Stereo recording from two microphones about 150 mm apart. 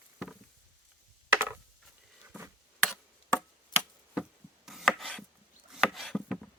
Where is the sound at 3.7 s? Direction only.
30° left (ahead or behind).